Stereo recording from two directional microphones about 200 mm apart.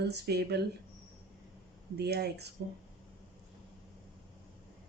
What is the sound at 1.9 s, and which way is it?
Speech, 55° right (ahead or behind).